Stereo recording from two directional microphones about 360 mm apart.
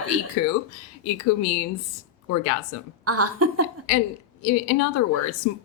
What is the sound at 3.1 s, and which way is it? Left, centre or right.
Speech, right.